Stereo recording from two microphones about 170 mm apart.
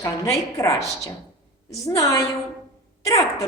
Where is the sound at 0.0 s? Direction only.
20° left (ahead or behind).